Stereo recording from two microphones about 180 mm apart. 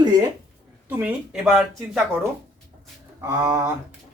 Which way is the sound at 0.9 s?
10° right (ahead or behind).